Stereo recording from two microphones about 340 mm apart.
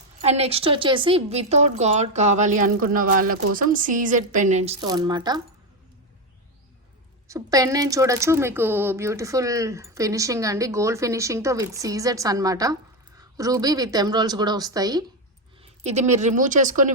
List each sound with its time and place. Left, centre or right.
0.2 s a woman's voice: centre
7.3 s a woman's voice: centre